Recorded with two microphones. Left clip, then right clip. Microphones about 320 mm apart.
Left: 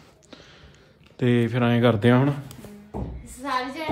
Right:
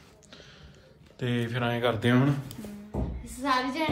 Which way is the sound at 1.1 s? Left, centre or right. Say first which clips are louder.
Left 8 dB; left.